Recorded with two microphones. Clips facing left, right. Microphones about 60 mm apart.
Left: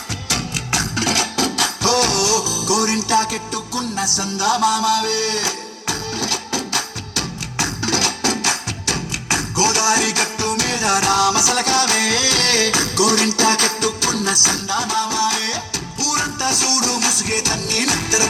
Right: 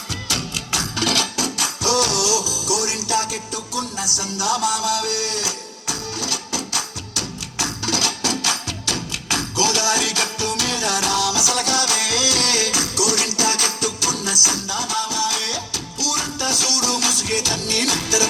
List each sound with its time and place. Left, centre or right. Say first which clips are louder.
0.3 s music: left 4 dB; left
0.9 s music: even; left
1.4 s music: left 5 dB; left